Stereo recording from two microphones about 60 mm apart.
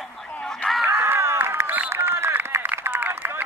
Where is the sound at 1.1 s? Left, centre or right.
Right.